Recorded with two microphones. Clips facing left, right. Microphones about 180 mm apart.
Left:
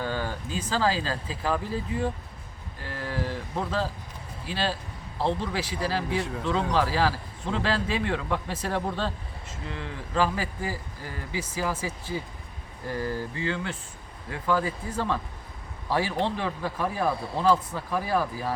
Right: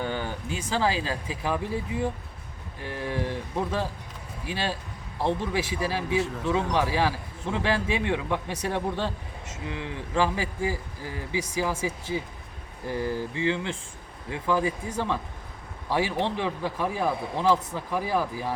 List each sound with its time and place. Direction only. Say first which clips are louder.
0.0 s a man's voice: even; 20° right (ahead or behind)